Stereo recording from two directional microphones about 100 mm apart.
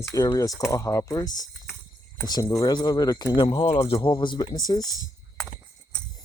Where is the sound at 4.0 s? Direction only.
50° left (ahead or behind).